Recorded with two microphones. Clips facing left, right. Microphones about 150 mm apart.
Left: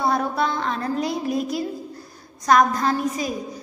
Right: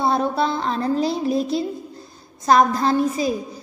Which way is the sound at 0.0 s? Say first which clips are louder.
Right 2 dB; 25° right (ahead or behind).